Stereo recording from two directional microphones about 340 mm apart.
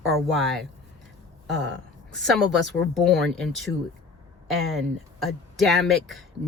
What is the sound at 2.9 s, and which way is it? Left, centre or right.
Speech, centre.